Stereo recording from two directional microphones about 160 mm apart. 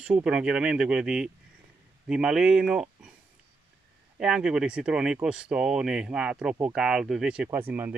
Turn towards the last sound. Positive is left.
turn(degrees=-10)  # may be behind; listen again after turning